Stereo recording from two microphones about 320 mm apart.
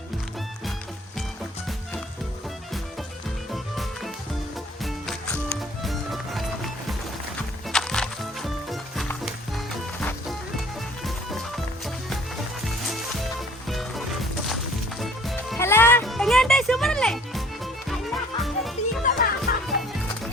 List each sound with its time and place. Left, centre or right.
3.5 s music: centre
7.7 s music: centre
13.7 s music: centre
15.0 s music: centre
19.0 s music: left